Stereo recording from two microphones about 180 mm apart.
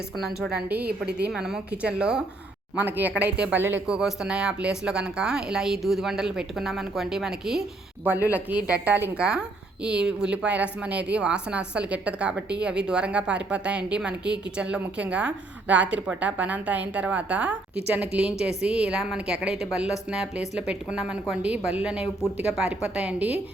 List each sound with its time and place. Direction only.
0.4 s a woman's voice: 10° right (ahead or behind)
0.9 s a woman's voice: 65° right (ahead or behind)
1.3 s a woman's voice: 5° right (ahead or behind)